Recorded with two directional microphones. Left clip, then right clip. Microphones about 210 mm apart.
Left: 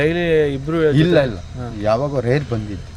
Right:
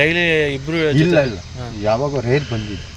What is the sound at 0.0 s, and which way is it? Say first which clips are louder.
Speech: right 1 dB; 45° left (ahead or behind).